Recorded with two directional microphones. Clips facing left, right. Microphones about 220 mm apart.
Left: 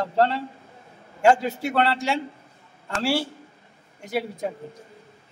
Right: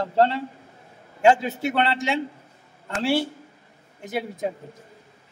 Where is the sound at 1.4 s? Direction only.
20° right (ahead or behind).